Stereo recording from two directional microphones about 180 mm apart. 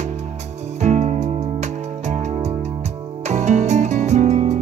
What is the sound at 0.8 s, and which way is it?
Music, 40° right (ahead or behind).